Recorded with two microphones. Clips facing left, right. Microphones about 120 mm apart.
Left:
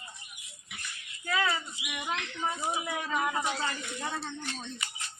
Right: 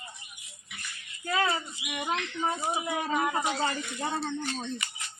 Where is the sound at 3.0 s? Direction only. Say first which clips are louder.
Right 3 dB; 40° right (ahead or behind).